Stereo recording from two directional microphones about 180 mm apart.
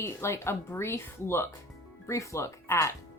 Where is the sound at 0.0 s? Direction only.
15° left (ahead or behind).